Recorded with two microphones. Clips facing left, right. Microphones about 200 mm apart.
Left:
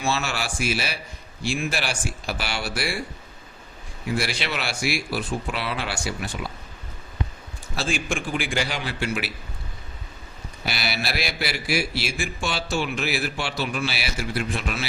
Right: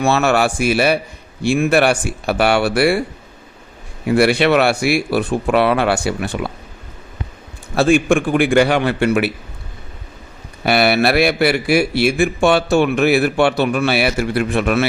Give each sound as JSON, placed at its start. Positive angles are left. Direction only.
{"t": 0.0, "sound": "a man's voice", "side_deg": -60}
{"t": 4.0, "sound": "a man's voice", "side_deg": -60}
{"t": 7.8, "sound": "a man's voice", "side_deg": -60}
{"t": 10.6, "sound": "a man's voice", "side_deg": -60}